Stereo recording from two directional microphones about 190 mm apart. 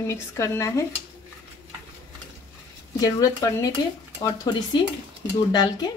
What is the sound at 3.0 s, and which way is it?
Speech, 20° left (ahead or behind).